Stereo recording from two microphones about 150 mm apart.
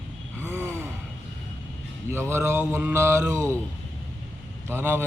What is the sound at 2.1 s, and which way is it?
Mantra, 15° right (ahead or behind).